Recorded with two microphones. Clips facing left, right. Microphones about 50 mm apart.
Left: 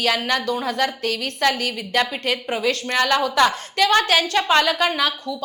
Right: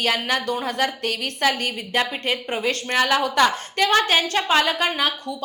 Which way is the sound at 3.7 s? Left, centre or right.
Centre.